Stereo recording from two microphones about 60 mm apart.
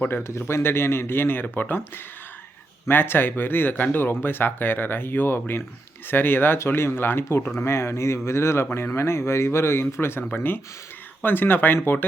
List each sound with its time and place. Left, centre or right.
0.0 s speech: left
2.8 s a man's voice: left